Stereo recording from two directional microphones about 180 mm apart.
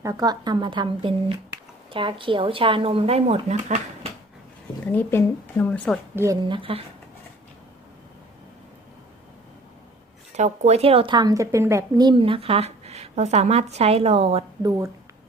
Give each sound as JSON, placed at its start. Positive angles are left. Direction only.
{"t": 0.0, "sound": "speech", "side_deg": -20}
{"t": 4.9, "sound": "speech", "side_deg": 10}
{"t": 6.4, "sound": "speech", "side_deg": -30}
{"t": 10.3, "sound": "a woman's voice", "side_deg": -40}
{"t": 14.6, "sound": "speech", "side_deg": -15}